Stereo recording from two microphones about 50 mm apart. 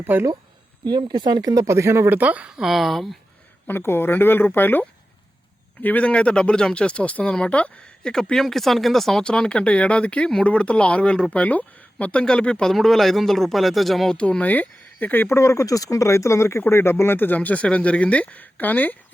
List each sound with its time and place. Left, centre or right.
0.0 s speech: right
1.6 s speech: right
2.0 s speech: right
2.5 s speech: centre
3.7 s speech: left
5.8 s speech: left
8.1 s speech: centre
9.2 s speech: centre
11.3 s speech: left
12.2 s speech: centre
12.7 s speech: centre
14.1 s speech: left
15.3 s speech: left